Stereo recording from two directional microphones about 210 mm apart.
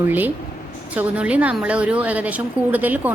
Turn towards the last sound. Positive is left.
turn(degrees=-10)  # may be behind; listen again after turning